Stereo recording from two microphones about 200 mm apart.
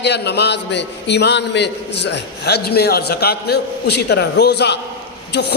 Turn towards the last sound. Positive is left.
turn(degrees=55)  # may be behind; listen again after turning